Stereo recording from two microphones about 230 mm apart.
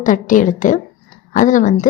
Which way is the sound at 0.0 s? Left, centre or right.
Left.